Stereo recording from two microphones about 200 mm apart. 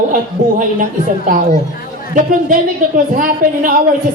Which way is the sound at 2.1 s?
40° right (ahead or behind).